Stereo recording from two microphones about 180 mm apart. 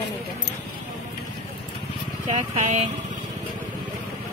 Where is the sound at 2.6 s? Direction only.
35° right (ahead or behind).